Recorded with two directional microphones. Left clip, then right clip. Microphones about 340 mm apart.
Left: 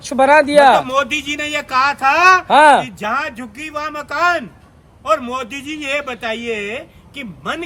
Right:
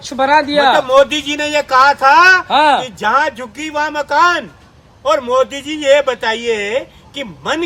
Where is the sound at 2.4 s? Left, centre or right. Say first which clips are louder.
Left 2 dB; left.